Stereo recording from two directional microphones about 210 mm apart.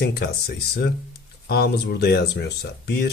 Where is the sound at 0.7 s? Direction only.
50° left (ahead or behind).